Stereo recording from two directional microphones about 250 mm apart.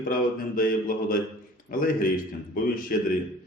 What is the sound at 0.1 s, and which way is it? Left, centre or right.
A man's voice, left.